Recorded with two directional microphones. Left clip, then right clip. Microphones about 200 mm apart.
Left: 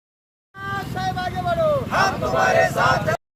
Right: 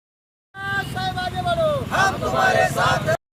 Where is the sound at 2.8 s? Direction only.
15° right (ahead or behind).